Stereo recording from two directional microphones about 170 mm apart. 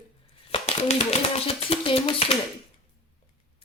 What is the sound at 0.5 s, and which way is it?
Speech, 40° left (ahead or behind).